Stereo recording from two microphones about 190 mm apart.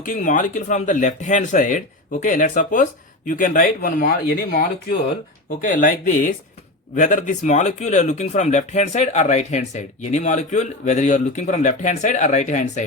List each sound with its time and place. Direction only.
0.0 s speech: 45° left (ahead or behind)